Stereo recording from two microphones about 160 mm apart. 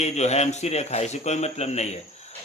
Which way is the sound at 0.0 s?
45° left (ahead or behind).